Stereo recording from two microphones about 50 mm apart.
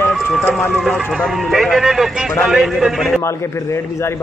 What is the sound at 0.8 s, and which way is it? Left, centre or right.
A man's voice, centre.